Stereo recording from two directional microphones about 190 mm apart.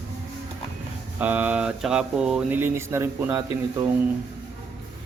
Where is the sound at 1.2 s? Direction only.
10° right (ahead or behind).